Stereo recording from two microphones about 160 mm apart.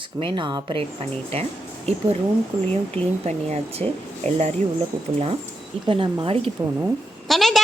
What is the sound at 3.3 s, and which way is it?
Speech, 40° right (ahead or behind).